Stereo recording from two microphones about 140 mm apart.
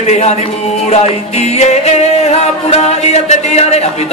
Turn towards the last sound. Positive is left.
turn(degrees=50)  # may be behind; listen again after turning